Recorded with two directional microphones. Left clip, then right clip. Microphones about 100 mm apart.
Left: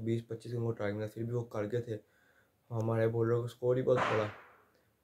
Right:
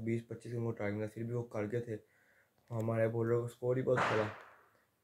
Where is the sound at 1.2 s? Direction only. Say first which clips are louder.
Left 3 dB; 25° left (ahead or behind).